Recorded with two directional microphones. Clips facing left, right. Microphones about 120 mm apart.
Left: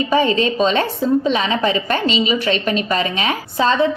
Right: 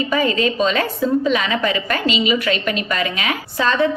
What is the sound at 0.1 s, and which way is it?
A woman's voice, 30° left (ahead or behind).